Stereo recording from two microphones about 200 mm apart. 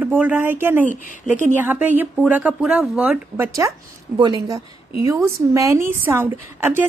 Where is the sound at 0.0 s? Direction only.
5° right (ahead or behind).